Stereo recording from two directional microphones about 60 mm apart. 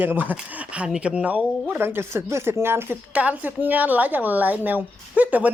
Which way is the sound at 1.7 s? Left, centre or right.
Right.